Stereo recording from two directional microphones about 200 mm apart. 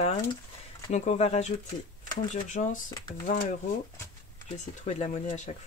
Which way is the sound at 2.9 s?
20° left (ahead or behind).